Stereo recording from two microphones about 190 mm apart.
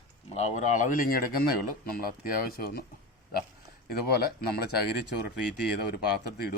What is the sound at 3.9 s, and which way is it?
Speech, 55° left (ahead or behind).